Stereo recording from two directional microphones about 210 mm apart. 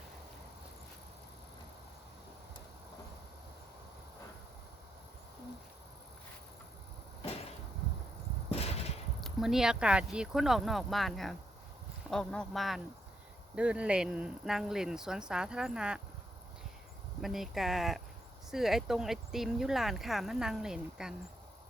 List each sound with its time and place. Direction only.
8.5 s a sound: 30° left (ahead or behind)
9.2 s speech: centre (ahead or behind)
17.2 s speech: centre (ahead or behind)